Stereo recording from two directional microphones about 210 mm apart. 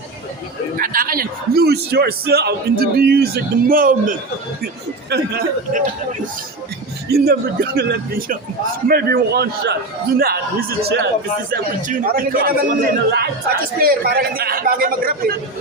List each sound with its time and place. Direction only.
0.8 s a man's voice: 40° right (ahead or behind)
7.1 s a man's voice: 50° right (ahead or behind)